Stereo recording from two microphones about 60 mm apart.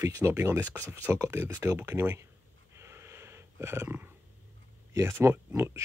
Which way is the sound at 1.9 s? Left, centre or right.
Right.